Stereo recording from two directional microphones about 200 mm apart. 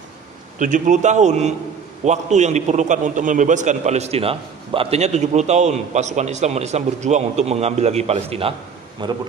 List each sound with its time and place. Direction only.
0.6 s a man's voice: 40° right (ahead or behind); by 9.1 s 25° right (ahead or behind)